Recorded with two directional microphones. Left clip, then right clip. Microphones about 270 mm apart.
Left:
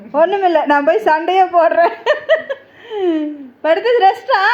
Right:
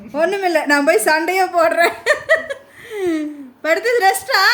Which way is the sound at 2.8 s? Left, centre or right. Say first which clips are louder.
Left 5 dB; left.